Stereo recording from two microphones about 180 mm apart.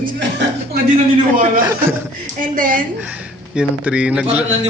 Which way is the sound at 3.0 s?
5° right (ahead or behind).